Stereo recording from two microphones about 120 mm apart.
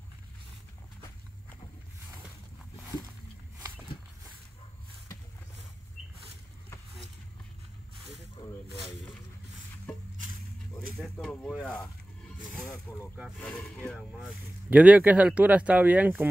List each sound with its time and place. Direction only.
11.0 s snake: 5° left (ahead or behind)
12.9 s speech: 20° left (ahead or behind)
13.9 s speech: 10° right (ahead or behind)